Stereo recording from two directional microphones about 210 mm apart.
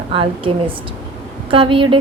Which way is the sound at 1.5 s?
25° right (ahead or behind).